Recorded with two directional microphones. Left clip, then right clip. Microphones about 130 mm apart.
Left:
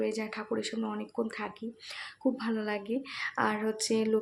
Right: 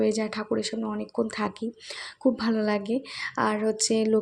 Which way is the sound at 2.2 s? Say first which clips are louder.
Right 7 dB; 35° right (ahead or behind).